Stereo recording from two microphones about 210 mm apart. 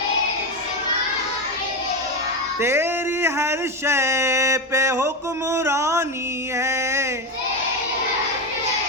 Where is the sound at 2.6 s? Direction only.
10° right (ahead or behind).